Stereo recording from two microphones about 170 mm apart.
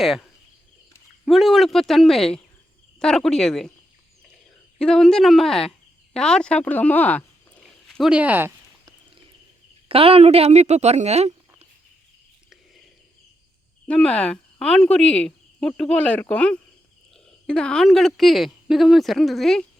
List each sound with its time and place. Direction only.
0.0 s a woman's voice: centre (ahead or behind)
4.8 s a woman's voice: 5° left (ahead or behind)
9.9 s a woman's voice: 35° right (ahead or behind)
13.8 s a woman's voice: 5° left (ahead or behind)